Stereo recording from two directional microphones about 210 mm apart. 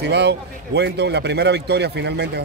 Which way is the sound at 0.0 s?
50° right (ahead or behind).